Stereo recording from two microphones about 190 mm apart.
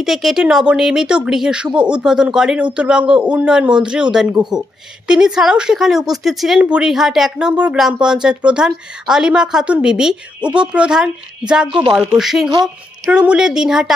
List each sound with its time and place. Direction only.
0.0 s speech: centre (ahead or behind)
11.7 s speech: 25° right (ahead or behind)
12.0 s speech: centre (ahead or behind)
12.4 s speech: 20° right (ahead or behind)
13.1 s speech: 5° right (ahead or behind)